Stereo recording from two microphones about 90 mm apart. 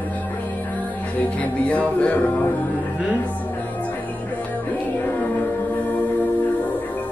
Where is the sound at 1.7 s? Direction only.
15° left (ahead or behind).